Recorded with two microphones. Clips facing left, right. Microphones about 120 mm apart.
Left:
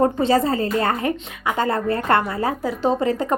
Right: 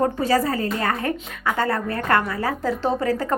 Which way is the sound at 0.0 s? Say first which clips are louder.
Left 3 dB; 25° left (ahead or behind).